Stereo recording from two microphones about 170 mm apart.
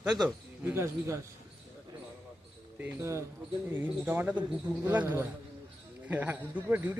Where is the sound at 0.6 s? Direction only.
15° right (ahead or behind).